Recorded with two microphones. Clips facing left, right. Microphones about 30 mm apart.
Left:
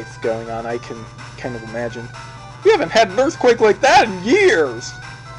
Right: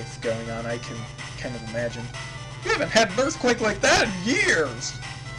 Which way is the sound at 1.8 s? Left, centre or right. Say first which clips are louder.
Left 1 dB; centre.